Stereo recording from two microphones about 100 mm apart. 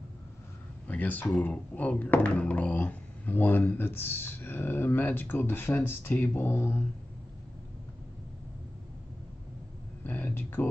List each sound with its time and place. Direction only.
0.8 s speech: 15° left (ahead or behind)
10.0 s speech: 20° left (ahead or behind)